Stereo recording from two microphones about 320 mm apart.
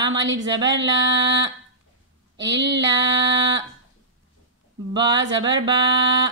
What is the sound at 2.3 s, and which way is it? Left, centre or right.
Speech, right.